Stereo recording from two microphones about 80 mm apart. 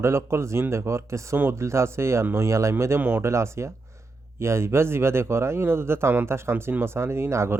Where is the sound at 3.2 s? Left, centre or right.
Right.